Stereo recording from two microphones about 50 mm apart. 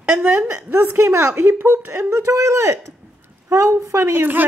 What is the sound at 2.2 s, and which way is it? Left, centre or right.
A man's voice, right.